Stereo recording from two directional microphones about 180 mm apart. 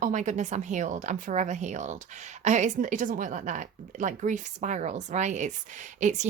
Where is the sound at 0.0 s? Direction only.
45° right (ahead or behind).